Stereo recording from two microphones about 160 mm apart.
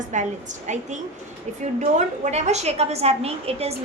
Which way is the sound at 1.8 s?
45° right (ahead or behind).